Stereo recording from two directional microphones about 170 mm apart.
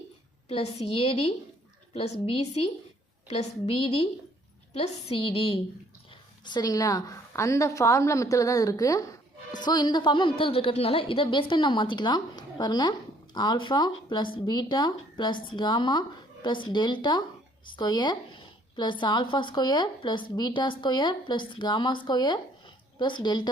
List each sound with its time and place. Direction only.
0.4 s a woman's voice: 40° left (ahead or behind)